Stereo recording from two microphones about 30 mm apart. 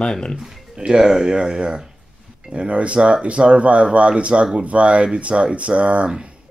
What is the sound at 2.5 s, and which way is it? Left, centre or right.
Speech, right.